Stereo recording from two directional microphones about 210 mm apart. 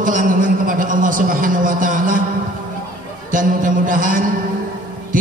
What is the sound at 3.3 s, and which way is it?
Speech, 40° right (ahead or behind).